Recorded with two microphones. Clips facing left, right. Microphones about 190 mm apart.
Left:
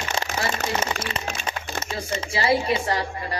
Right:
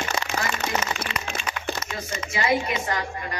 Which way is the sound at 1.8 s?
30° left (ahead or behind).